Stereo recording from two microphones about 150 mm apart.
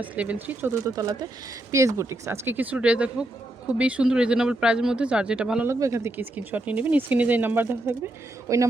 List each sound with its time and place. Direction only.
0.0 s speech: 10° right (ahead or behind)
5.8 s speech: 20° right (ahead or behind)